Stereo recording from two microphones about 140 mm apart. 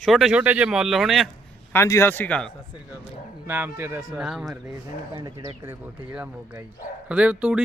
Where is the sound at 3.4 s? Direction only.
15° right (ahead or behind).